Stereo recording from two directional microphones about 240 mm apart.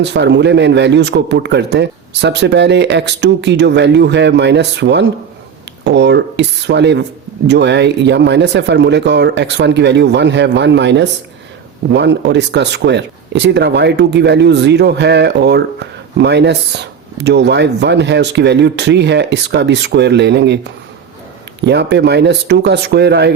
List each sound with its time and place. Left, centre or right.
0.0 s speech: right